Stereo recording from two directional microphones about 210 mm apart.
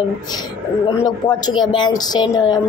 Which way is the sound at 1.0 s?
20° left (ahead or behind).